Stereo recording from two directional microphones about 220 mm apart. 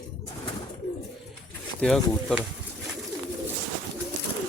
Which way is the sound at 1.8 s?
Centre (ahead or behind).